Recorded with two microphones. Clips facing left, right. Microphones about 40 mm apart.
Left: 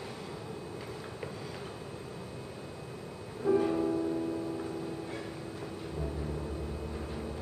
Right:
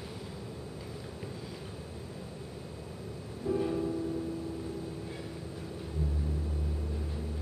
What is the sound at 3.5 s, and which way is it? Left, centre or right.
Music, left.